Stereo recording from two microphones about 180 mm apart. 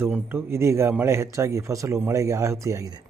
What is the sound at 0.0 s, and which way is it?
Speech, 10° right (ahead or behind).